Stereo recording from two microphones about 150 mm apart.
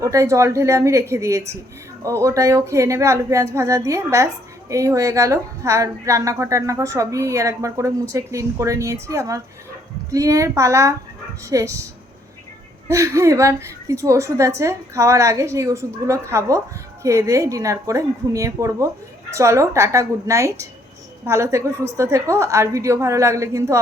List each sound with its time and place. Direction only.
0.0 s speech: 20° right (ahead or behind)
12.9 s speech: 20° right (ahead or behind)